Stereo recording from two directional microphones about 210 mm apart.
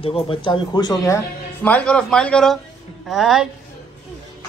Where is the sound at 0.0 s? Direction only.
25° left (ahead or behind); by 3.4 s centre (ahead or behind).